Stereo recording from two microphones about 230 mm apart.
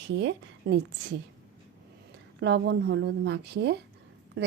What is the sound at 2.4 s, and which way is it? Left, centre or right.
A woman's voice, right.